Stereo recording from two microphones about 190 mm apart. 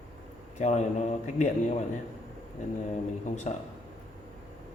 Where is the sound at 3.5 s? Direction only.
35° left (ahead or behind).